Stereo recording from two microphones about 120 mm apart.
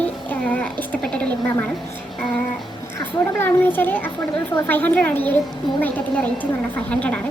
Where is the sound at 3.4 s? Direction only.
15° left (ahead or behind).